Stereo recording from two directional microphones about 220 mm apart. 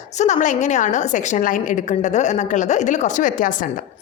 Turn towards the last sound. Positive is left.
turn(degrees=35)  # may be behind; listen again after turning